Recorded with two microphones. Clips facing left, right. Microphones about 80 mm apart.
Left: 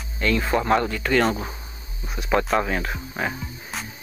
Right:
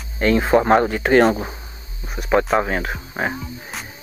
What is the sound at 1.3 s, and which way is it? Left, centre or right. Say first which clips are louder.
Speech: right 5 dB; centre.